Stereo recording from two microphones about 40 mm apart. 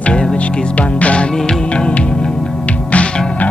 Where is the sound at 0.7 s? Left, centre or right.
Left.